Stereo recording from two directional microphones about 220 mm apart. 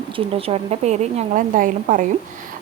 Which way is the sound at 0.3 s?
25° right (ahead or behind).